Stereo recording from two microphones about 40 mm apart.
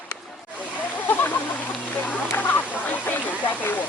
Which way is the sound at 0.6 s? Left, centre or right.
Left.